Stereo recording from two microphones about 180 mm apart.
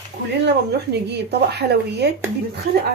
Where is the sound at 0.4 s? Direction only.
65° right (ahead or behind).